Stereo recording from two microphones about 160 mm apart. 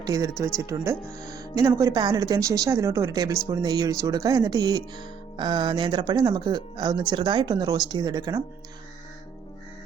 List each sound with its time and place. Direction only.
0.0 s speech: 20° right (ahead or behind)